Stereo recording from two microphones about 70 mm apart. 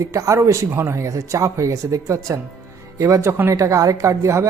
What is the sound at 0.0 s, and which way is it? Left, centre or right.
Speech, right.